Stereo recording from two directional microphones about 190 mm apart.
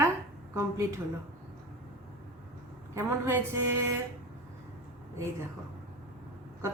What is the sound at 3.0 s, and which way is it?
Speech, 15° right (ahead or behind).